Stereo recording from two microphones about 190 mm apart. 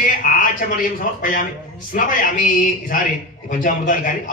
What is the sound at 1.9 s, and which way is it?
Speech, 45° left (ahead or behind).